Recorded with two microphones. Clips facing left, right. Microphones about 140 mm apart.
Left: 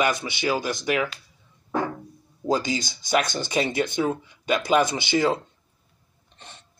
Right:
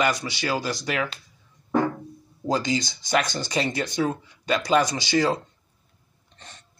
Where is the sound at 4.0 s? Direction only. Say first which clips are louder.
Even; 10° left (ahead or behind).